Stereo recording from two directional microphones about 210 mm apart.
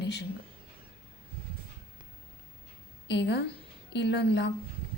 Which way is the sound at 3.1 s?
55° left (ahead or behind).